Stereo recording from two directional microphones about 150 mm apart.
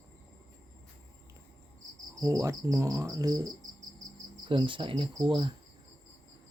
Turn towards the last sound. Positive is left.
turn(degrees=-30)  # may be behind; listen again after turning